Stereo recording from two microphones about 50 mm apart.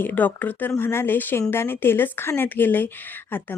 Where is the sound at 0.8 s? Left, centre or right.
Left.